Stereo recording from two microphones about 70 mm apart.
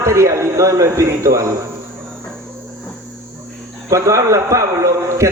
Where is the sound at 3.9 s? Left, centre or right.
Right.